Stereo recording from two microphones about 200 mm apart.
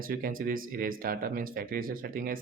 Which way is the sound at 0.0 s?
45° right (ahead or behind).